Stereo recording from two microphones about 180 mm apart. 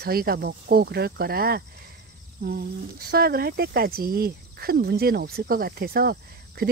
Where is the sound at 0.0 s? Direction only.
55° right (ahead or behind).